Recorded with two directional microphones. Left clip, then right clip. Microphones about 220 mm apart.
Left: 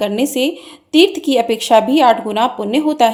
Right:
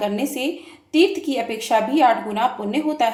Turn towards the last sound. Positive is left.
turn(degrees=40)  # may be behind; listen again after turning